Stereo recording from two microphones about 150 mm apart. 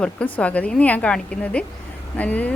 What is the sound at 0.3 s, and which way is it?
A woman's voice, 10° left (ahead or behind).